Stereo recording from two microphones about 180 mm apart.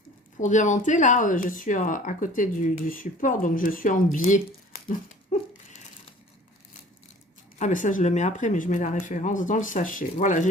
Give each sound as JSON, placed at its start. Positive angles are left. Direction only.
{"t": 0.3, "sound": "speech", "side_deg": 45}
{"t": 4.9, "sound": "a sound", "side_deg": 45}
{"t": 7.6, "sound": "speech", "side_deg": 45}